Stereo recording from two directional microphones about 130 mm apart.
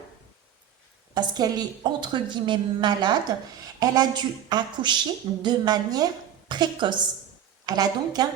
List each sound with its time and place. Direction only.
1.1 s a woman's voice: 30° right (ahead or behind)